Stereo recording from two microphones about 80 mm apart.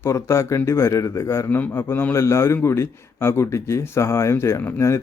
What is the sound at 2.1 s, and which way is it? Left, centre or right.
Speech, left.